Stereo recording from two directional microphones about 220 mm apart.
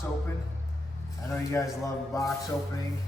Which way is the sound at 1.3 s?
15° left (ahead or behind).